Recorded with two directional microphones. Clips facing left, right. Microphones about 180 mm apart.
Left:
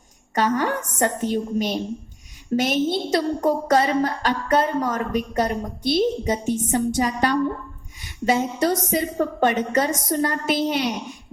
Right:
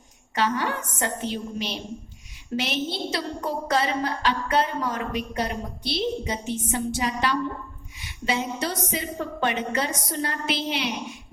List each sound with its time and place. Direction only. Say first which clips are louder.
0.3 s a woman's voice: left 4 dB; 45° left (ahead or behind)
7.9 s a sound: left 6 dB; 45° left (ahead or behind)
8.9 s a woman's voice: left 7 dB; 45° left (ahead or behind)